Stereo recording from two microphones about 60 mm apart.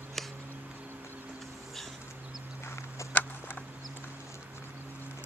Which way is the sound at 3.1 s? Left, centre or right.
Left.